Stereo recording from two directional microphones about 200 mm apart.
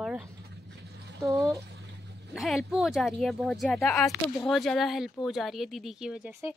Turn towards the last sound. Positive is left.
turn(degrees=-5)  # may be behind; listen again after turning